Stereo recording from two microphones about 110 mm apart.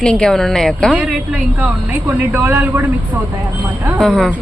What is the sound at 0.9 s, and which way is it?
A woman's voice, 10° right (ahead or behind).